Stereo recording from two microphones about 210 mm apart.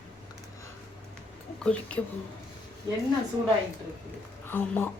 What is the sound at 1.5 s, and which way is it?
Speech, 5° left (ahead or behind).